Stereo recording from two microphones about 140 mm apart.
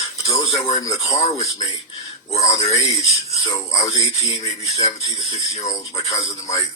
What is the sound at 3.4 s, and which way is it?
A man's voice, 25° left (ahead or behind).